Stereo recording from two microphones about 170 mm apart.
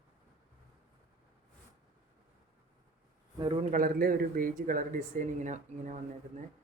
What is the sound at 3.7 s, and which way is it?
Speech, 55° right (ahead or behind).